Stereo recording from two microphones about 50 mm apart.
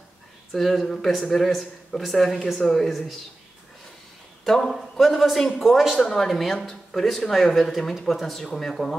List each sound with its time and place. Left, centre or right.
0.5 s speech: centre
4.5 s speech: centre